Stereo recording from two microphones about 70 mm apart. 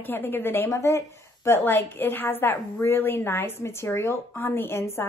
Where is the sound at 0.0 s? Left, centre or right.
Left.